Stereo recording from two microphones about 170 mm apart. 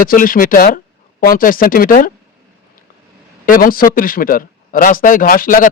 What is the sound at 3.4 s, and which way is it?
A man's voice, 55° left (ahead or behind).